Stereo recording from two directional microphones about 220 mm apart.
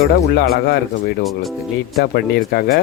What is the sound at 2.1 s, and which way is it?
Speech, 45° left (ahead or behind).